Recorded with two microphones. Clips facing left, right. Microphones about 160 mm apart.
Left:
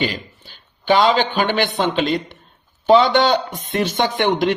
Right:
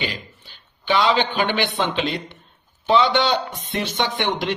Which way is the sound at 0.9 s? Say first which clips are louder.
Left 4 dB; 45° left (ahead or behind).